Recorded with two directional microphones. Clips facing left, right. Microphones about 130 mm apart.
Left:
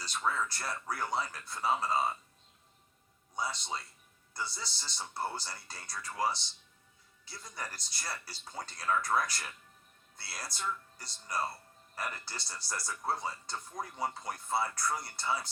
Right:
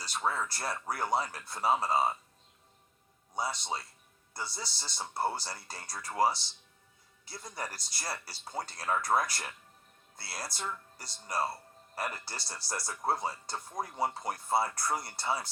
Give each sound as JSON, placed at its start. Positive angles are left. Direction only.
{"t": 0.1, "sound": "speech", "side_deg": -30}
{"t": 3.3, "sound": "speech", "side_deg": -30}
{"t": 10.7, "sound": "speech", "side_deg": -30}